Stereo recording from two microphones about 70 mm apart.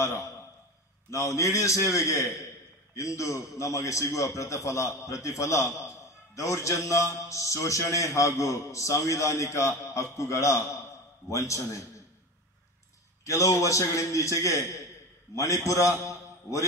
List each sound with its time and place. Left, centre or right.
0.0 s a man's voice: left
13.2 s a man's voice: left